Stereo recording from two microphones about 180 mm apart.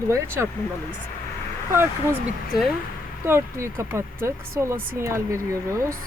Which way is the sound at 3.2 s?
15° right (ahead or behind).